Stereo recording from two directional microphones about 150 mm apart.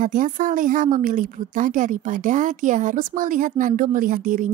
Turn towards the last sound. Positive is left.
turn(degrees=-60)  # may be behind; listen again after turning